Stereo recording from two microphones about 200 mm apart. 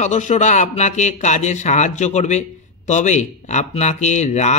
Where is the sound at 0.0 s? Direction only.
35° left (ahead or behind).